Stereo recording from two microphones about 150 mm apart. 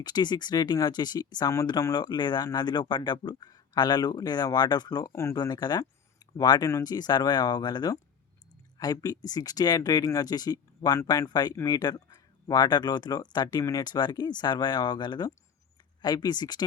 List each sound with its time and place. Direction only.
0.0 s speech: 30° left (ahead or behind)